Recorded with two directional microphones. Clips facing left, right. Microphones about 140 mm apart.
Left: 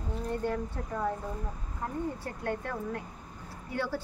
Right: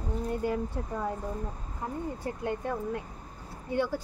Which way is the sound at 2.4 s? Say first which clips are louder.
Right 1 dB; 15° right (ahead or behind).